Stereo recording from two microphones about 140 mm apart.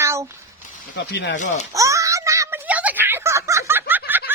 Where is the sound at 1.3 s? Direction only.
60° left (ahead or behind).